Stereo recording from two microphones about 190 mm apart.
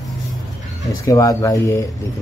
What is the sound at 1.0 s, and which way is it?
Speech, 15° left (ahead or behind).